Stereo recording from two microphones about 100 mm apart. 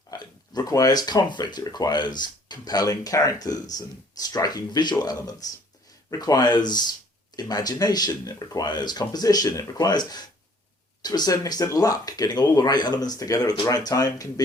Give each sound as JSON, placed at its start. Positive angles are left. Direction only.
{"t": 0.1, "sound": "speech", "side_deg": 35}